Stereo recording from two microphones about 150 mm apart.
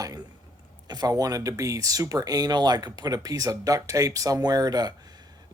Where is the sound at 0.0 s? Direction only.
25° right (ahead or behind).